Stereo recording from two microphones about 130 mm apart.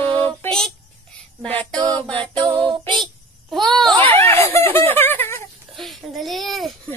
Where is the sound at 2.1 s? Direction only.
40° right (ahead or behind).